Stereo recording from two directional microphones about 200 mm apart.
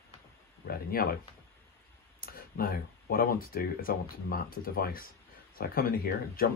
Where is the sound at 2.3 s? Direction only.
50° left (ahead or behind).